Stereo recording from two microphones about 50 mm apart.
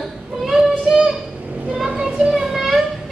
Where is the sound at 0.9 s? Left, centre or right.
Centre.